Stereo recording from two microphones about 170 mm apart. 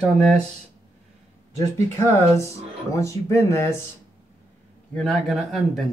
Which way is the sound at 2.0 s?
15° left (ahead or behind).